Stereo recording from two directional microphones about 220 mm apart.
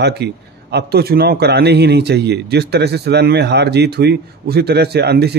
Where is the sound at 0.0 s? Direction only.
50° right (ahead or behind).